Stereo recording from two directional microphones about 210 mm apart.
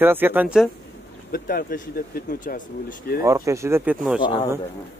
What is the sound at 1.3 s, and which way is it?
Speech, 45° left (ahead or behind).